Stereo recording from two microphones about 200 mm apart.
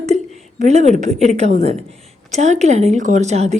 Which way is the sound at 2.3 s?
35° right (ahead or behind).